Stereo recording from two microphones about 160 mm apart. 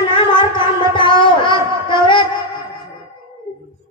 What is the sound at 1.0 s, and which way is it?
Music, 30° left (ahead or behind).